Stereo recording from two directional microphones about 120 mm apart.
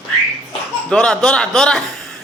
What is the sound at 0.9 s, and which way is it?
Speech, 5° left (ahead or behind).